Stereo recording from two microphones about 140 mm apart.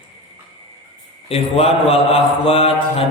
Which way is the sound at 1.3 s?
45° left (ahead or behind).